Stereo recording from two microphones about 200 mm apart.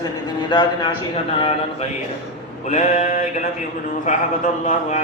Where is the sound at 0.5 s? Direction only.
25° left (ahead or behind).